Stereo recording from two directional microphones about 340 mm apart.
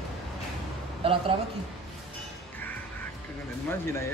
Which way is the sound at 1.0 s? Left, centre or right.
Centre.